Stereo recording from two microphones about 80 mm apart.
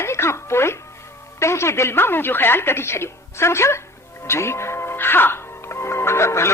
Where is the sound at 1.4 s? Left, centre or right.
Left.